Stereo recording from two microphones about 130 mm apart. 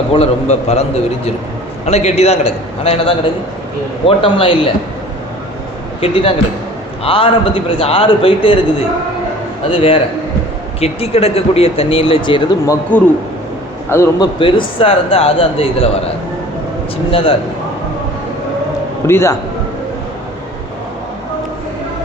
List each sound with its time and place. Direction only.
0.1 s speech: 50° left (ahead or behind)
6.0 s speech: 45° left (ahead or behind)
9.6 s speech: 45° left (ahead or behind)
12.9 s a man's voice: 10° left (ahead or behind)
14.2 s speech: 40° left (ahead or behind)
17.1 s speech: 45° left (ahead or behind)
19.0 s a man's voice: 20° left (ahead or behind)